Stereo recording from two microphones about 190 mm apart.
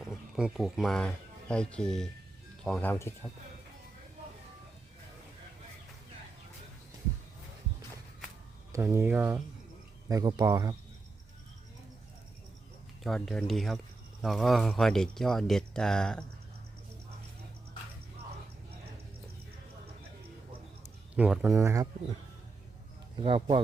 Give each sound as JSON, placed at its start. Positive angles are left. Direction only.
{"t": 0.3, "sound": "speech", "side_deg": -5}
{"t": 8.7, "sound": "speech", "side_deg": -15}
{"t": 10.1, "sound": "speech", "side_deg": -20}
{"t": 13.0, "sound": "speech", "side_deg": 0}
{"t": 21.2, "sound": "speech", "side_deg": -5}
{"t": 21.5, "sound": "speech", "side_deg": -15}
{"t": 23.1, "sound": "speech", "side_deg": -25}